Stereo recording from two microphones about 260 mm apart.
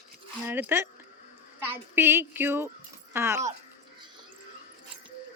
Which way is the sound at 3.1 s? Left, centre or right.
Centre.